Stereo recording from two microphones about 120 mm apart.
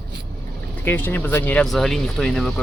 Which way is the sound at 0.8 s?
15° left (ahead or behind).